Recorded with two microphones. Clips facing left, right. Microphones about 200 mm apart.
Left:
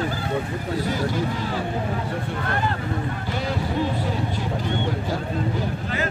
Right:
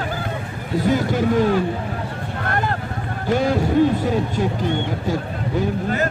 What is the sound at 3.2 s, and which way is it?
Run, 50° right (ahead or behind).